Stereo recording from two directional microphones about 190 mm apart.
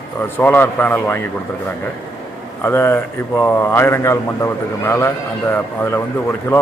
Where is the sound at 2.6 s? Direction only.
10° left (ahead or behind).